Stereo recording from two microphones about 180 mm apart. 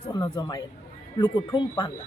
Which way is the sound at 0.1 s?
20° left (ahead or behind).